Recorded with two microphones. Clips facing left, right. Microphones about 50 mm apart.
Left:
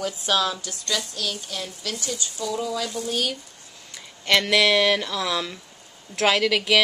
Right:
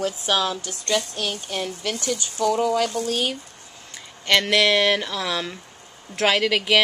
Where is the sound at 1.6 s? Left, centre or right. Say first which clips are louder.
Right 7 dB; right.